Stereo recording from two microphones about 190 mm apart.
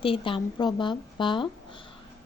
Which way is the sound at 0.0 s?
25° left (ahead or behind).